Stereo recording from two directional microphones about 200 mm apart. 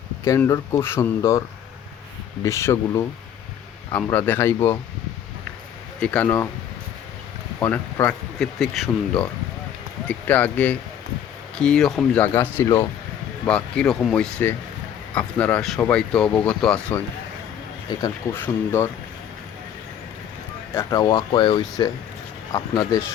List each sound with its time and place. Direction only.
0.3 s speech: 15° left (ahead or behind)
6.0 s speech: 5° left (ahead or behind)
7.6 s speech: 10° left (ahead or behind)
18.0 s speech: 10° left (ahead or behind)
20.7 s speech: 20° left (ahead or behind)